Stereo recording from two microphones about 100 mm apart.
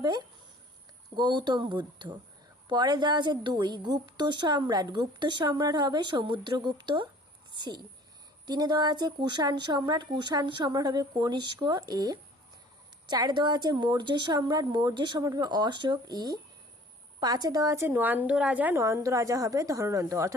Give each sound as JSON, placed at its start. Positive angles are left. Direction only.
{"t": 0.0, "sound": "a woman's voice", "side_deg": -45}
{"t": 10.7, "sound": "a woman's voice", "side_deg": -40}
{"t": 18.8, "sound": "a woman's voice", "side_deg": -30}